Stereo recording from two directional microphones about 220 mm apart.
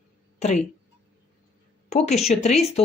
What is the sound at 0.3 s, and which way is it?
Speech, 30° left (ahead or behind).